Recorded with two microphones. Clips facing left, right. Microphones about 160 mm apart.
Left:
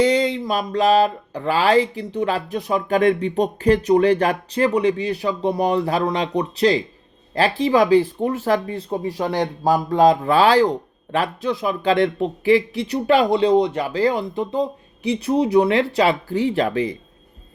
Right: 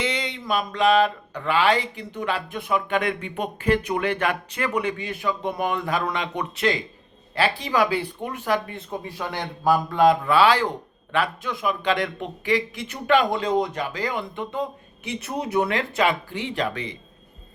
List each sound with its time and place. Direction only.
0.0 s speech: 35° left (ahead or behind)